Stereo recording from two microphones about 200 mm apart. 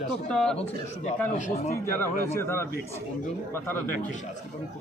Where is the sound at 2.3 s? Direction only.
10° left (ahead or behind).